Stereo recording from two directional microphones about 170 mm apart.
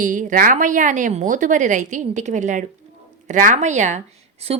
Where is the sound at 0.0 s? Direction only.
50° right (ahead or behind).